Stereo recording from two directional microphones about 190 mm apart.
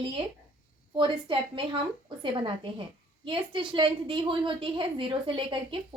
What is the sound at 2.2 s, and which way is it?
A woman's voice, 25° right (ahead or behind).